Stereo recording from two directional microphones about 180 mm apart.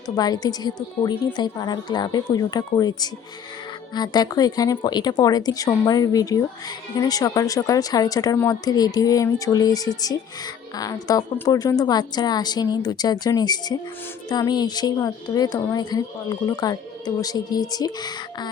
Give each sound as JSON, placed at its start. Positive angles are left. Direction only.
{"t": 0.2, "sound": "speech", "side_deg": 20}